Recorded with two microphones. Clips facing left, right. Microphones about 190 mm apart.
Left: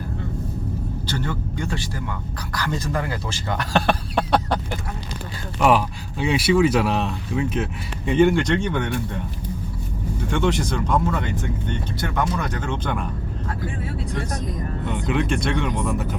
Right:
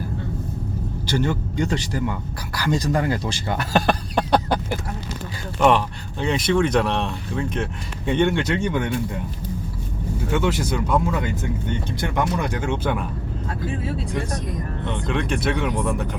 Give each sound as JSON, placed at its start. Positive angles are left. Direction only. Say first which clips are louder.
{"t": 1.0, "sound": "speech", "louder": "right 7 dB", "side_deg": -15}
{"t": 3.5, "sound": "speech", "louder": "even", "side_deg": -5}
{"t": 10.3, "sound": "speech", "louder": "even", "side_deg": -5}
{"t": 14.8, "sound": "speech", "louder": "left 2 dB", "side_deg": 5}